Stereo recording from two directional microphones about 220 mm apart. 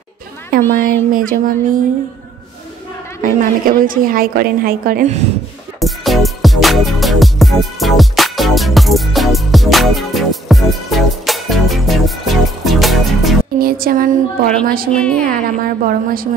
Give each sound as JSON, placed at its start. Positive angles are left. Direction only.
{"t": 0.5, "sound": "a sound", "side_deg": -40}
{"t": 1.1, "sound": "a woman's voice", "side_deg": -40}
{"t": 3.2, "sound": "a woman's voice", "side_deg": -35}
{"t": 5.8, "sound": "music", "side_deg": 0}
{"t": 13.6, "sound": "a woman's voice", "side_deg": -40}
{"t": 14.9, "sound": "a woman's voice", "side_deg": 5}
{"t": 15.2, "sound": "a woman's voice", "side_deg": -40}